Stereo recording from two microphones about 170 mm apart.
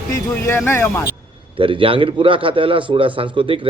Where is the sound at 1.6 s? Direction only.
30° right (ahead or behind).